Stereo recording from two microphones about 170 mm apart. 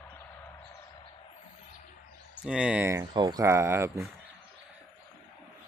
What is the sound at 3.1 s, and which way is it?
Speech, 25° right (ahead or behind).